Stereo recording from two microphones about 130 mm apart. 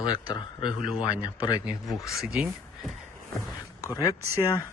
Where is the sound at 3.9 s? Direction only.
25° left (ahead or behind).